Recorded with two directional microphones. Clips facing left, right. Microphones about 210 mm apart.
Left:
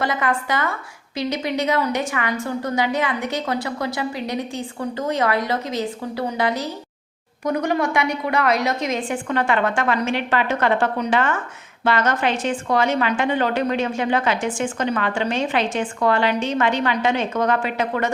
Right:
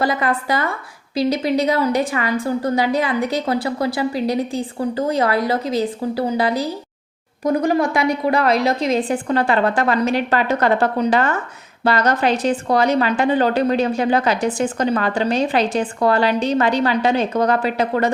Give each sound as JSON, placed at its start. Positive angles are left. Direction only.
{"t": 0.0, "sound": "a woman's voice", "side_deg": -35}